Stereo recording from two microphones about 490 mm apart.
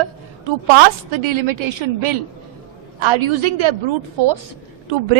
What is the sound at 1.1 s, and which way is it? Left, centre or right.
A woman's voice, right.